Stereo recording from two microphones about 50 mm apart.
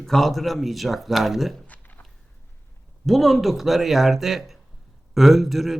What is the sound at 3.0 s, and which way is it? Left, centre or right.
Speech, centre.